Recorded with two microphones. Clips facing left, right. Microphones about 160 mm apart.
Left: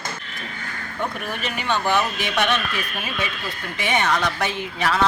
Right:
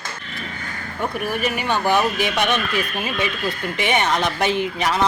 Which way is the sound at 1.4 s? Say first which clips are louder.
Right 1 dB; 10° right (ahead or behind).